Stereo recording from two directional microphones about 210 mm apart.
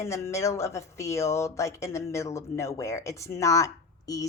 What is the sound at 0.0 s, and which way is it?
Speech, 15° left (ahead or behind).